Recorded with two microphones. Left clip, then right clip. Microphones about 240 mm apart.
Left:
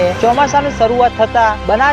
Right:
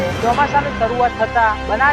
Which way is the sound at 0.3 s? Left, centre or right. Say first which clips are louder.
Left 4 dB; left.